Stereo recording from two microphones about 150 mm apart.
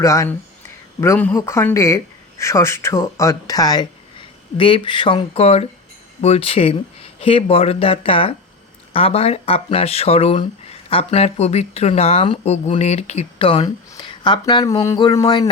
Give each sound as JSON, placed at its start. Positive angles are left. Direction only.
{"t": 0.0, "sound": "speech", "side_deg": 20}
{"t": 13.7, "sound": "speech", "side_deg": 30}
{"t": 15.2, "sound": "speech", "side_deg": 30}